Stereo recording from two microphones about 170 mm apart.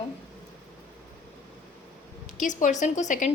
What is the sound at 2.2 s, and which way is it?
A woman's voice, 50° left (ahead or behind).